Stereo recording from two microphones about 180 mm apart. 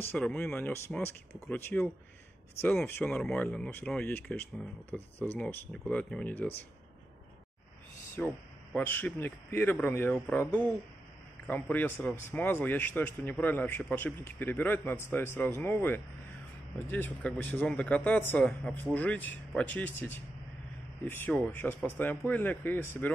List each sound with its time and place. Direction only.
0.1 s a man's voice: 10° left (ahead or behind)
8.2 s a man's voice: 10° left (ahead or behind)
11.7 s a man's voice: 10° left (ahead or behind)